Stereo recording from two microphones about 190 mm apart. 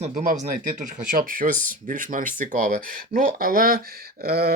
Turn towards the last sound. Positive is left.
turn(degrees=-55)  # may be behind; listen again after turning